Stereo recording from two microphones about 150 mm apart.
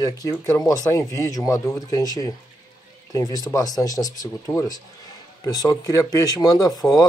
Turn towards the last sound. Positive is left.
turn(degrees=25)  # may be behind; listen again after turning